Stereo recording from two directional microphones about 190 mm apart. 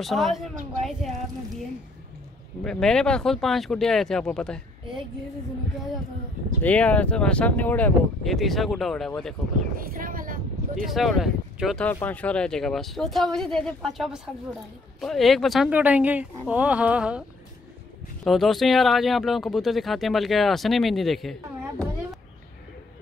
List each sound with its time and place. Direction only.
0.0 s speech: centre (ahead or behind)
2.6 s speech: 5° left (ahead or behind)
6.6 s speech: 5° left (ahead or behind)
9.8 s a sound: 45° right (ahead or behind)
10.9 s speech: centre (ahead or behind)
18.2 s speech: centre (ahead or behind)